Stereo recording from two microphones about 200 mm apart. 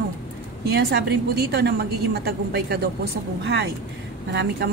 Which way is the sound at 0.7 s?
55° right (ahead or behind).